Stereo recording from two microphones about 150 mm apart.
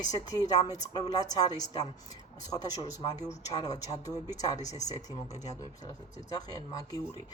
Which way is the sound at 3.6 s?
25° left (ahead or behind).